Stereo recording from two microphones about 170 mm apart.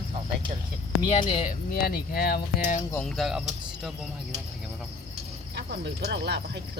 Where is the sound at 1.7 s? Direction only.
60° left (ahead or behind).